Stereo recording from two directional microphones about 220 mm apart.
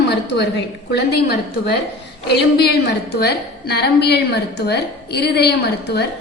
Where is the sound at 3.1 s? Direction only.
45° left (ahead or behind).